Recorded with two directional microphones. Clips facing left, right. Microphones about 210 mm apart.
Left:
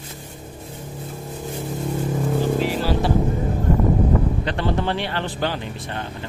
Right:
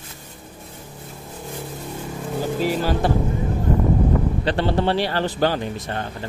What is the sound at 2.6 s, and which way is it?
Vehicle, 50° right (ahead or behind).